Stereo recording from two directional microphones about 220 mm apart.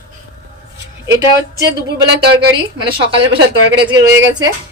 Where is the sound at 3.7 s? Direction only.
15° right (ahead or behind).